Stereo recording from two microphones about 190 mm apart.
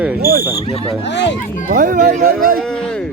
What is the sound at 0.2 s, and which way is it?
Speech, 50° right (ahead or behind).